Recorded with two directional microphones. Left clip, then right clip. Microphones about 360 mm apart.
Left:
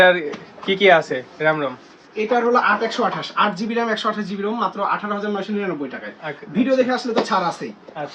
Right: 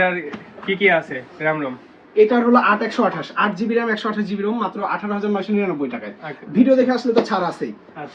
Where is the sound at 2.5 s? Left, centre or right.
Centre.